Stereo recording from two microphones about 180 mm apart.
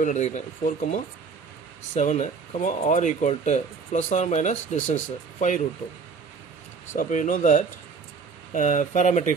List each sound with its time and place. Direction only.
0.0 s speech: 40° left (ahead or behind)
6.9 s speech: 45° left (ahead or behind)